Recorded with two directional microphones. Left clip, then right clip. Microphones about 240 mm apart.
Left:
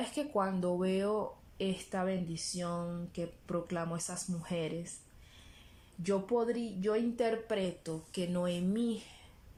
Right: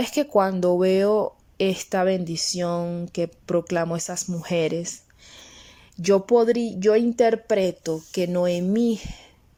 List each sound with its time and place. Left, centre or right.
0.0 s speech: right
6.0 s speech: right